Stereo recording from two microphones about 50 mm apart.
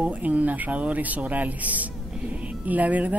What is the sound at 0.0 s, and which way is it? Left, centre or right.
Speech, right.